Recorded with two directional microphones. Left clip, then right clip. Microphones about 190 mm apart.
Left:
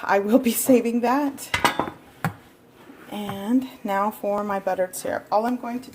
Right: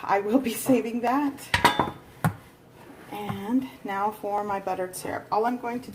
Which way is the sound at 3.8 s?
45° left (ahead or behind).